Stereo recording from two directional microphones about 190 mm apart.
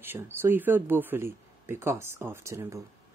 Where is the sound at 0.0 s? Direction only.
10° right (ahead or behind).